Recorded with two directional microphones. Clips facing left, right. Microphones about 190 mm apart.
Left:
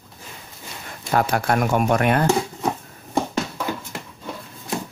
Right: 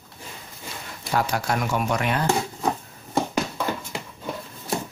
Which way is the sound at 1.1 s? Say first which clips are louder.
Left 4 dB; 55° left (ahead or behind).